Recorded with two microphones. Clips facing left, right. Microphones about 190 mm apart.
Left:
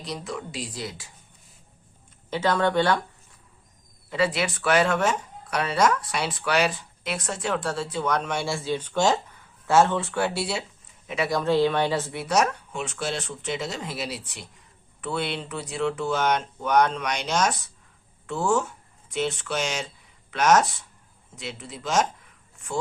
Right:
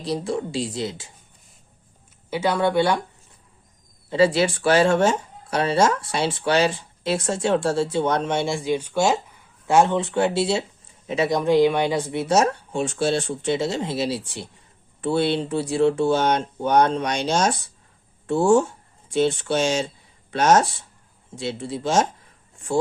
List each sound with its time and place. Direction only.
0.0 s speech: 30° right (ahead or behind)
2.3 s speech: 10° right (ahead or behind)
4.1 s speech: 30° right (ahead or behind)
12.2 s speech: 25° right (ahead or behind)
22.5 s a sound: 30° right (ahead or behind)